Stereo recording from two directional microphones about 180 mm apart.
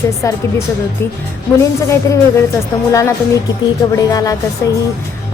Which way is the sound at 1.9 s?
15° left (ahead or behind).